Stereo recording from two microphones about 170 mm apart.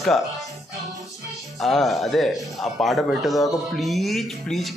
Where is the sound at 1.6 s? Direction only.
Centre (ahead or behind).